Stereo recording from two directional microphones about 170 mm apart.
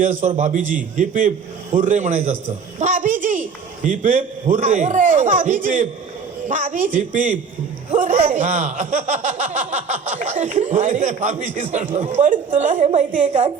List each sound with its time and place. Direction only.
0.0 s speech: 45° right (ahead or behind)